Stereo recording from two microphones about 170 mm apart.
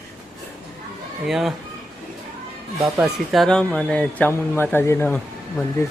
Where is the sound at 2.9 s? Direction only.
Centre (ahead or behind).